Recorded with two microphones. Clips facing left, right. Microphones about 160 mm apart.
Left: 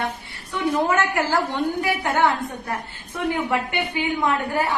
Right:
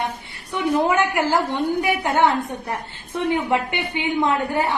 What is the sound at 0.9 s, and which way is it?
A woman's voice, 15° right (ahead or behind).